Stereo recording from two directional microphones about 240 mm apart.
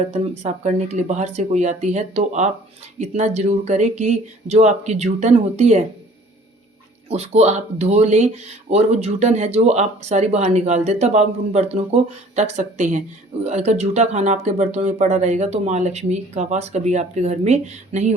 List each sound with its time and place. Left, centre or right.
0.1 s speech: right
7.1 s speech: right